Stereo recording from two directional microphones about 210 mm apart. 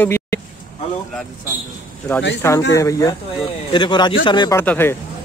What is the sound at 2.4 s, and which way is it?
Speech, 10° left (ahead or behind).